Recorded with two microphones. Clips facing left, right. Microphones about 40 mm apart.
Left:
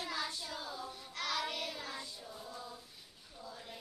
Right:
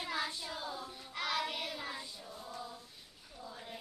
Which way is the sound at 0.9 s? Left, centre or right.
Centre.